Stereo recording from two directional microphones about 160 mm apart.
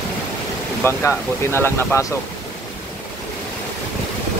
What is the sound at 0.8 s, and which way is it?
Speech, 15° left (ahead or behind).